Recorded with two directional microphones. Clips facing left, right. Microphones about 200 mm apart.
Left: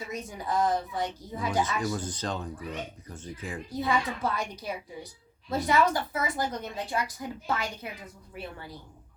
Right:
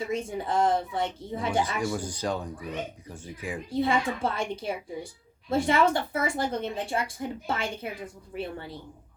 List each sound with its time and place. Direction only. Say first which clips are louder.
0.1 s a woman's voice: even; 25° right (ahead or behind)
1.9 s speech: right 2 dB; 10° right (ahead or behind)
3.7 s a woman's voice: right 3 dB; 25° right (ahead or behind)